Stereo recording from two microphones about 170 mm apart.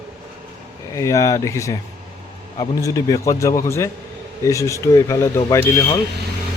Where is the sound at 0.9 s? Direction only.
20° left (ahead or behind).